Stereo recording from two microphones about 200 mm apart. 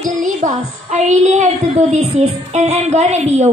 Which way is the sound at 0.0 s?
40° right (ahead or behind).